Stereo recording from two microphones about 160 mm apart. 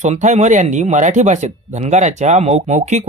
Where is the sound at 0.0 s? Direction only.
45° right (ahead or behind).